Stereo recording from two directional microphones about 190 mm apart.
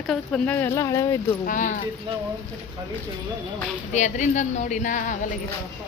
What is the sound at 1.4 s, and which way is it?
Speech, 40° left (ahead or behind).